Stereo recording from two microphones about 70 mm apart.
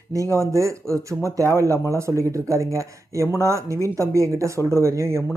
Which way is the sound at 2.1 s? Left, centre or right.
Right.